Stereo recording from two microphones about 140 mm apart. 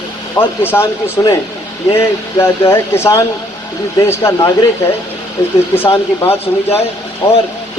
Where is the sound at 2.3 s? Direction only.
20° left (ahead or behind).